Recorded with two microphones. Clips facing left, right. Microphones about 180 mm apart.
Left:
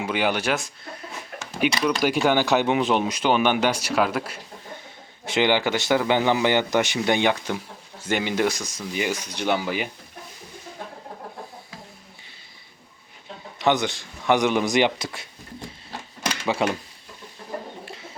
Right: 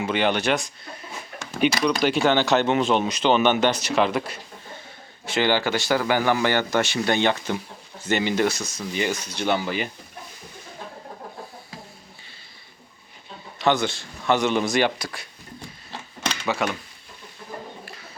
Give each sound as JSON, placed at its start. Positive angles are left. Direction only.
{"t": 0.0, "sound": "speech", "side_deg": 10}
{"t": 5.2, "sound": "speech", "side_deg": 20}
{"t": 13.6, "sound": "speech", "side_deg": 20}
{"t": 16.4, "sound": "speech", "side_deg": 30}
{"t": 17.8, "sound": "music", "side_deg": 25}